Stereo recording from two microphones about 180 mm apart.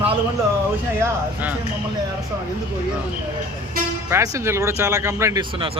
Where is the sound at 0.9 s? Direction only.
10° right (ahead or behind).